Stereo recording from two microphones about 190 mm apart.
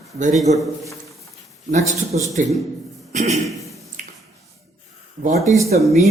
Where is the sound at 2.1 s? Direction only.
40° right (ahead or behind).